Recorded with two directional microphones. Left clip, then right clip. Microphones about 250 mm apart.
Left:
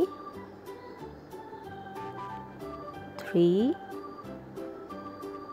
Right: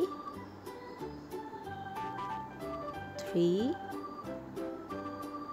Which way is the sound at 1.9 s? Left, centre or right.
Centre.